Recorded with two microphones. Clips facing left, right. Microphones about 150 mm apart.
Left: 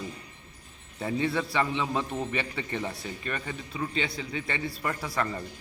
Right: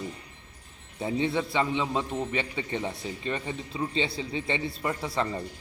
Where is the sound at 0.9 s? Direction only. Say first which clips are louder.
Right 1 dB; 20° right (ahead or behind).